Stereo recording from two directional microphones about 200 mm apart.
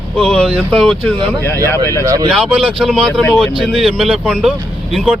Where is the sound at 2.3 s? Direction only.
Centre (ahead or behind).